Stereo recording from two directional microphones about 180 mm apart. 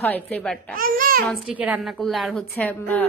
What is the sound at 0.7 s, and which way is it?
Speech, 50° right (ahead or behind).